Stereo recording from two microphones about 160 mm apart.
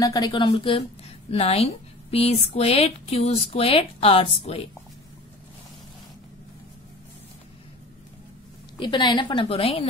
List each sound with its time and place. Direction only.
0.0 s a woman's voice: 25° left (ahead or behind)
8.7 s speech: 30° left (ahead or behind)